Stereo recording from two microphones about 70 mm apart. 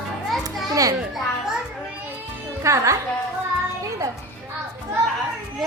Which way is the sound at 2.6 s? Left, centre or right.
Right.